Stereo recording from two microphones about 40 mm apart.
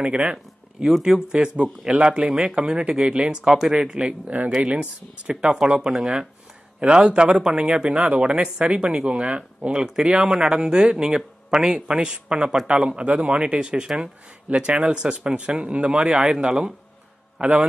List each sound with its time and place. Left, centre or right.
0.0 s a man's voice: right
6.9 s a man's voice: right
8.0 s a man's voice: right
14.7 s a man's voice: right